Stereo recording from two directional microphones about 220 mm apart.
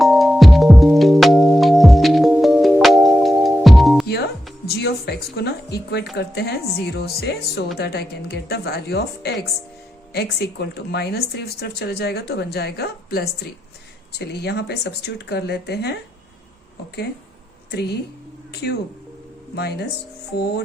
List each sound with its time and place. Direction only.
0.0 s music: centre (ahead or behind)
4.6 s a sound: 45° left (ahead or behind)
6.1 s speech: 45° left (ahead or behind)
18.5 s speech: 50° left (ahead or behind)